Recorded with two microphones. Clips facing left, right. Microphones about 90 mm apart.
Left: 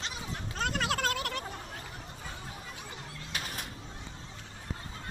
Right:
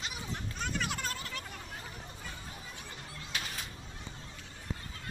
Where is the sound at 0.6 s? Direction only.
85° left.